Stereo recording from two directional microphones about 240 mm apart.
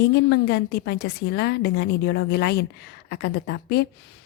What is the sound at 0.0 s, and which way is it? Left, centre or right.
A woman's voice, left.